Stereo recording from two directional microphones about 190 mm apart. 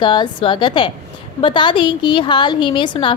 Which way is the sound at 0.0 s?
25° left (ahead or behind).